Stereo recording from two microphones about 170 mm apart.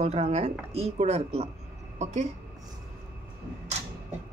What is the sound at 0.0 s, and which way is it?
Speech, 40° right (ahead or behind).